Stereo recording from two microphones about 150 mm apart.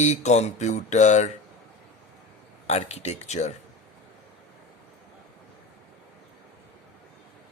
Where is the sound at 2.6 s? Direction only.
45° left (ahead or behind).